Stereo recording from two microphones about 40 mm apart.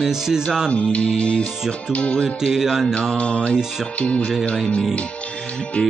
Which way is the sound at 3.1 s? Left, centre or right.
Left.